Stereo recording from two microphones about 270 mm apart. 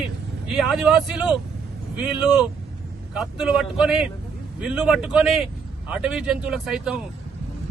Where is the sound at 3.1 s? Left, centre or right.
Centre.